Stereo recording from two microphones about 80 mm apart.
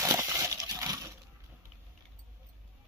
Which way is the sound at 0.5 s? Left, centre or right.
Right.